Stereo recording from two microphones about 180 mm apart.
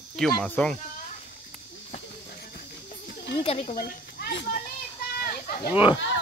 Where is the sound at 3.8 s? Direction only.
55° left (ahead or behind).